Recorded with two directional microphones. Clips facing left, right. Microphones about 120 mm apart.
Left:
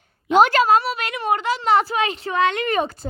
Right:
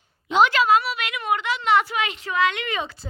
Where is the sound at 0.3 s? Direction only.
45° left (ahead or behind).